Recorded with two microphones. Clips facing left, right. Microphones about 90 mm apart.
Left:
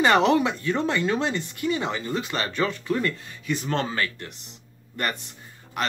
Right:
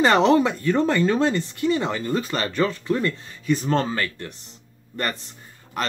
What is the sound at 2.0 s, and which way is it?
Speech, 45° right (ahead or behind).